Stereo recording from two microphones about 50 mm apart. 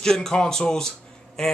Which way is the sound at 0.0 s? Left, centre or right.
Centre.